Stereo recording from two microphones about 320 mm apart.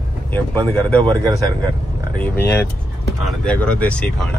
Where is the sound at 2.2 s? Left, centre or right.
Centre.